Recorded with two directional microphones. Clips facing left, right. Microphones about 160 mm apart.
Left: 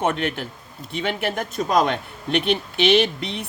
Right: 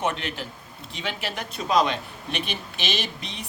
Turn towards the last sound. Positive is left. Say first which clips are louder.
# left 12 dB
turn(degrees=60)  # may be behind; listen again after turning